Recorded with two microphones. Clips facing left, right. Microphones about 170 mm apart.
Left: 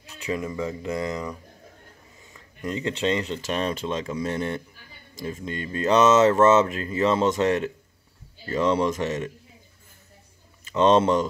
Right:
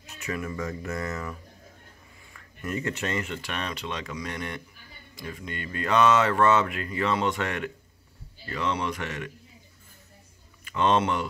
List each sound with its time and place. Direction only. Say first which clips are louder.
0.3 s speech: left 4 dB; 20° left (ahead or behind)
2.6 s speech: left 4 dB; 20° left (ahead or behind)
3.3 s speech: left 7 dB; 30° left (ahead or behind)
8.5 s speech: left 7 dB; 40° left (ahead or behind)
10.7 s speech: left 5 dB; 30° left (ahead or behind)